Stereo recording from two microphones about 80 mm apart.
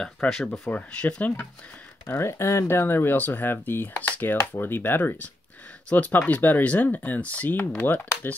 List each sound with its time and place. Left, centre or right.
0.0 s speech: centre
2.0 s speech: left